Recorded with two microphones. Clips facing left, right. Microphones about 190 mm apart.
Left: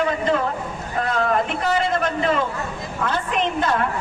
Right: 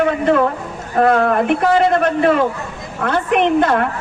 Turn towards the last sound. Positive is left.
turn(degrees=-60)  # may be behind; listen again after turning